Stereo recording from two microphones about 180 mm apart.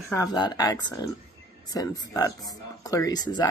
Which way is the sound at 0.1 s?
20° left (ahead or behind).